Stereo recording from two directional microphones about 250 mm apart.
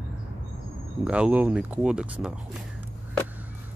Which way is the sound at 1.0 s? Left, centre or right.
Centre.